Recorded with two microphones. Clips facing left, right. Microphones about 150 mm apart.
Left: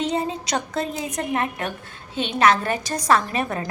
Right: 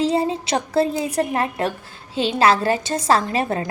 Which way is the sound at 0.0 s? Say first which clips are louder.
Right 5 dB; 30° right (ahead or behind).